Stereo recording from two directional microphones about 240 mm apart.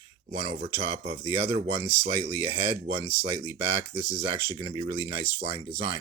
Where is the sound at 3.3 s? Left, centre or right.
Right.